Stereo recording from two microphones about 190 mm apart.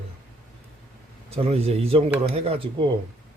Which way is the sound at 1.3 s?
30° right (ahead or behind).